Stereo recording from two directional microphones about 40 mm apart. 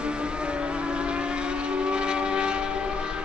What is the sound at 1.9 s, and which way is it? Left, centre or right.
Vehicle, right.